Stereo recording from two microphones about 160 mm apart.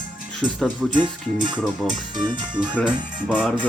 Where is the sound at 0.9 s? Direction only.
30° right (ahead or behind).